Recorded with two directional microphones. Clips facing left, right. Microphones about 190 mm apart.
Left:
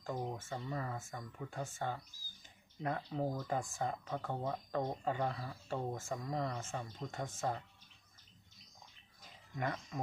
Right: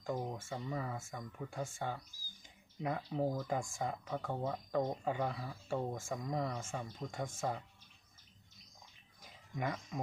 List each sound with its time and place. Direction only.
0.0 s speech: 10° right (ahead or behind)
9.6 s speech: 5° right (ahead or behind)